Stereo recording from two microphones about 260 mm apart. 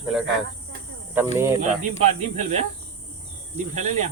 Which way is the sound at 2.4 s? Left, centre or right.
Right.